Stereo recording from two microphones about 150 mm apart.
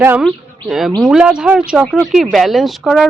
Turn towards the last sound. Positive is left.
turn(degrees=0)  # may be behind; listen again after turning